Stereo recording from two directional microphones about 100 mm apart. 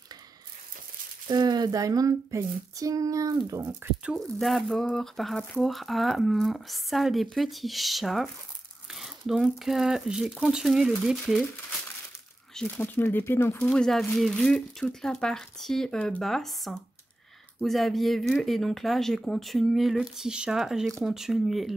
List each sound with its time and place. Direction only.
1.2 s a sound: 45° right (ahead or behind)
4.0 s speech: centre (ahead or behind)
12.6 s speech: 5° left (ahead or behind)
12.9 s speech: 20° left (ahead or behind)
13.6 s speech: 5° left (ahead or behind)